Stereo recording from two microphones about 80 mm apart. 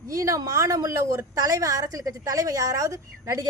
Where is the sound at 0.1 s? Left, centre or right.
Right.